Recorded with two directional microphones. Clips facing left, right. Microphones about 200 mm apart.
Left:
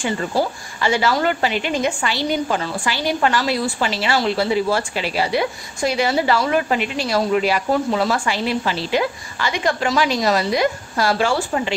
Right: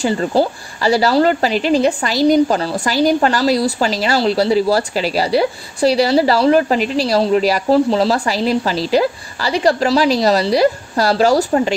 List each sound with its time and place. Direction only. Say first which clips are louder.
0.0 s a woman's voice: right 5 dB; 35° right (ahead or behind)